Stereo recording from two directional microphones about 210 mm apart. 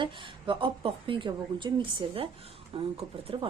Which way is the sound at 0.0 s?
25° right (ahead or behind).